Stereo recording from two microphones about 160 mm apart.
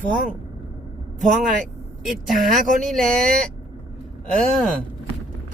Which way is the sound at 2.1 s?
Centre (ahead or behind).